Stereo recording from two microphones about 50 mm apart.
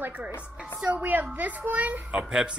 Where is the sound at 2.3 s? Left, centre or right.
Centre.